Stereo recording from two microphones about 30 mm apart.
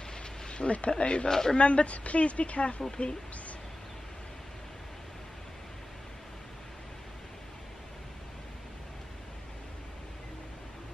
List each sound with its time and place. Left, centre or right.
0.5 s a sound: left
0.7 s speech: left
1.3 s speech: centre
1.6 s a woman's voice: left